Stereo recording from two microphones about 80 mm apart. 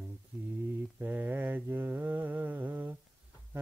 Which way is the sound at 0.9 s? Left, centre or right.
Right.